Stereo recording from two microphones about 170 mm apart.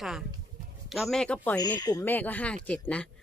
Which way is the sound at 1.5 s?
25° left (ahead or behind).